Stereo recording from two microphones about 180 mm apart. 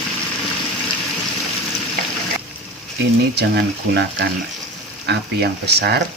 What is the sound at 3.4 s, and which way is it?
Speech, 65° right (ahead or behind).